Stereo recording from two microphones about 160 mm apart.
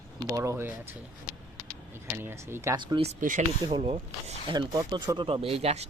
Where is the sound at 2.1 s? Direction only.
15° right (ahead or behind).